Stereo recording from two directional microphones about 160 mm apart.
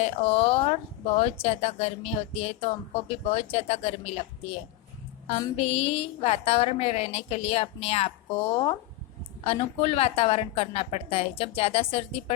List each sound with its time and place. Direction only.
0.0 s speech: 40° left (ahead or behind)
5.5 s speech: 40° left (ahead or behind)